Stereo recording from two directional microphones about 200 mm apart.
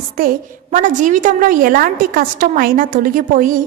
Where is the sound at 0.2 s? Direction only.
45° right (ahead or behind).